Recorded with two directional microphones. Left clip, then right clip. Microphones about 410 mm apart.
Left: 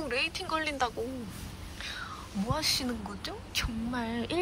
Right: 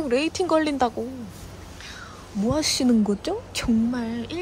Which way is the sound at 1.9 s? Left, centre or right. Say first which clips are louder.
Right 3 dB; centre.